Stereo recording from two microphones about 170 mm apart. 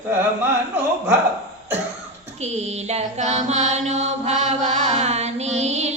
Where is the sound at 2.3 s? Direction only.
40° right (ahead or behind).